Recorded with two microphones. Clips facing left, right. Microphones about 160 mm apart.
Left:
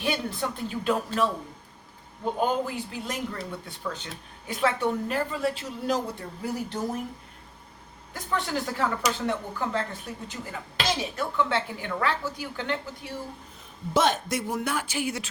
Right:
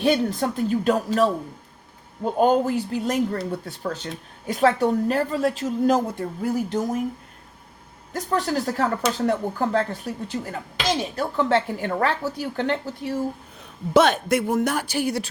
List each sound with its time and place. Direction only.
0.0 s a woman's voice: 40° right (ahead or behind)
8.1 s a woman's voice: 40° right (ahead or behind)
13.9 s a woman's voice: 65° right (ahead or behind); by 15.3 s 35° right (ahead or behind)